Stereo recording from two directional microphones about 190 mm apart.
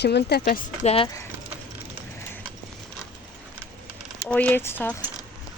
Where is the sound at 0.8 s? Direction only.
30° left (ahead or behind).